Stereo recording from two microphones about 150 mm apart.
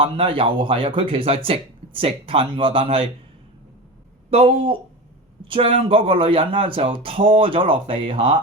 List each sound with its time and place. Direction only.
0.0 s speech: 35° right (ahead or behind)
4.3 s speech: 40° right (ahead or behind)